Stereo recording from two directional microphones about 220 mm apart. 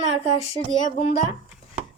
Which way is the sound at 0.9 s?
30° left (ahead or behind).